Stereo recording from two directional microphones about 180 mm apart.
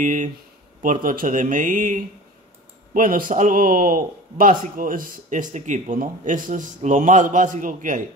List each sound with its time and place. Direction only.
0.0 s a man's voice: 45° right (ahead or behind)